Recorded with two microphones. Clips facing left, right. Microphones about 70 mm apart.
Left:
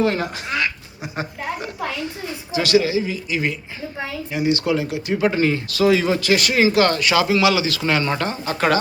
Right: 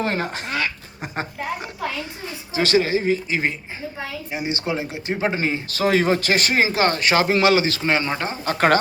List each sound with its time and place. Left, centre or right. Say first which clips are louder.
0.0 s speech: left 4 dB; right
2.5 s speech: left 1 dB; right
5.8 s speech: left 1 dB; right
7.8 s speech: left 1 dB; right
8.4 s speech: right 2 dB; right